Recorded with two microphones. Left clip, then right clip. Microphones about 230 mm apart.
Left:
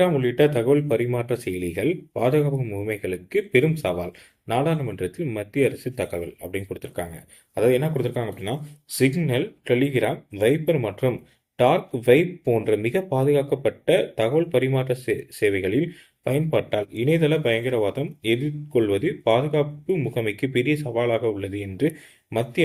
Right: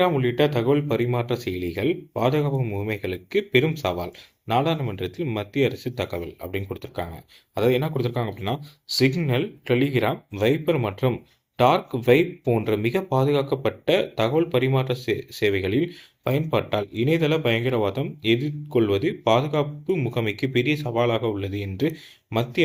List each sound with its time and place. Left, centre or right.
0.0 s speech: right